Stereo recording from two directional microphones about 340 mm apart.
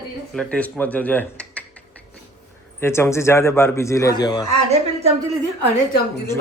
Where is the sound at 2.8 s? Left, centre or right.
Centre.